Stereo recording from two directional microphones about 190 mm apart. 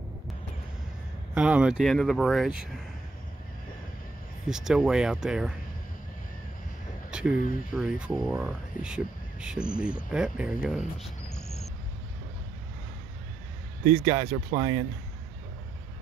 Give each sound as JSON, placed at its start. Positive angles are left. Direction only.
{"t": 1.3, "sound": "speech", "side_deg": -5}
{"t": 4.5, "sound": "speech", "side_deg": -5}
{"t": 7.1, "sound": "a sound", "side_deg": -5}
{"t": 7.7, "sound": "speech", "side_deg": 0}
{"t": 14.0, "sound": "speech", "side_deg": -25}